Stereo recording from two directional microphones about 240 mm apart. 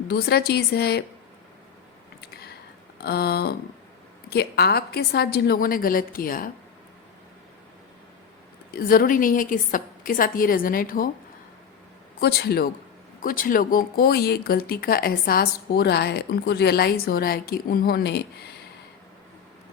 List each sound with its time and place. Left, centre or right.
0.1 s speech: left
3.0 s speech: left
8.7 s speech: left
12.2 s speech: left